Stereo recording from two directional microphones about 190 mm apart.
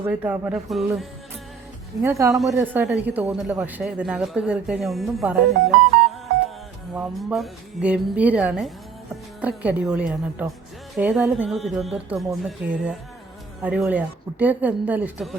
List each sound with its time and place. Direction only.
0.0 s a woman's voice: 10° right (ahead or behind)
2.0 s a woman's voice: 15° right (ahead or behind)
2.3 s speech: centre (ahead or behind)
6.9 s a woman's voice: 5° right (ahead or behind)